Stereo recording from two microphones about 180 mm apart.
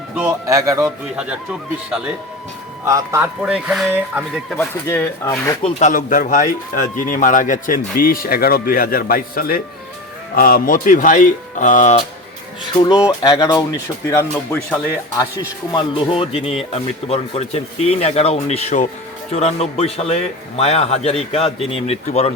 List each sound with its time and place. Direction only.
0.2 s a man's voice: 15° right (ahead or behind)
2.8 s a man's voice: 15° right (ahead or behind)
3.4 s speech: 5° right (ahead or behind)
4.5 s speech: 15° left (ahead or behind)
5.6 s speech: 40° left (ahead or behind)
12.7 s speech: 20° left (ahead or behind)
15.7 s speech: 30° left (ahead or behind)